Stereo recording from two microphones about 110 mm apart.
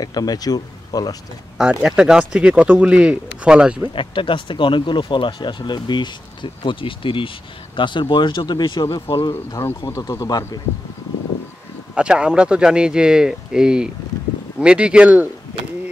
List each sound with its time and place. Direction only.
0.0 s speech: 35° left (ahead or behind)
1.6 s speech: 5° right (ahead or behind)
3.9 s speech: 50° left (ahead or behind)
9.1 s speech: 50° left (ahead or behind)
9.9 s speech: 30° left (ahead or behind)
11.9 s speech: 10° right (ahead or behind)